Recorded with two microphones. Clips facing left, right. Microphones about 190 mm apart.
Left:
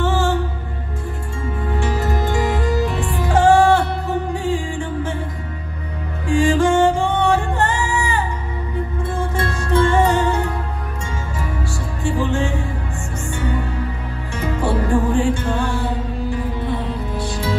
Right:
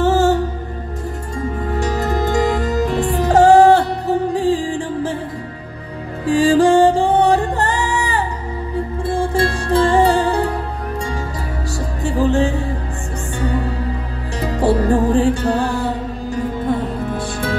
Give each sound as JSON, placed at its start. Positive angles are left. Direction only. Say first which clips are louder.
{"t": 0.0, "sound": "music", "louder": "right 5 dB", "side_deg": -40}
{"t": 1.8, "sound": "music", "louder": "right 3 dB", "side_deg": -40}
{"t": 6.2, "sound": "music", "louder": "right 4 dB", "side_deg": -35}
{"t": 12.0, "sound": "music", "louder": "right 4 dB", "side_deg": -40}
{"t": 14.4, "sound": "music", "louder": "right 4 dB", "side_deg": -35}